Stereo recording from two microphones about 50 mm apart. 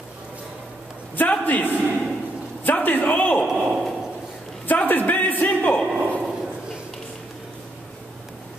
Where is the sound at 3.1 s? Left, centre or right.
Left.